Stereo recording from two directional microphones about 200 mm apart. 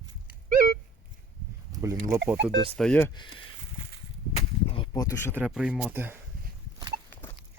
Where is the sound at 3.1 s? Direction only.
25° left (ahead or behind).